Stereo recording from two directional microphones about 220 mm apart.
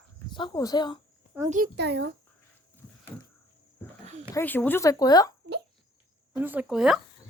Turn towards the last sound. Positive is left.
turn(degrees=-5)  # may be behind; listen again after turning